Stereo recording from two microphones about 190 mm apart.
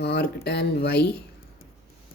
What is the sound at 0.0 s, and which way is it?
Speech, 60° left (ahead or behind).